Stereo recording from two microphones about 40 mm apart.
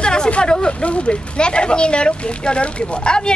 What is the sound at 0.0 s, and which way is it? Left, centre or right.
Hubbub, left.